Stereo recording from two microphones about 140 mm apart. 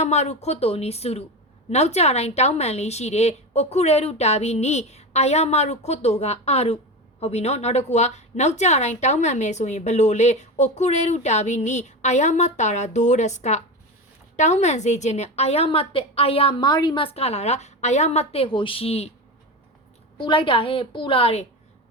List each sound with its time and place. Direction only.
0.0 s a woman's voice: 55° left (ahead or behind)
20.1 s a woman's voice: 35° left (ahead or behind)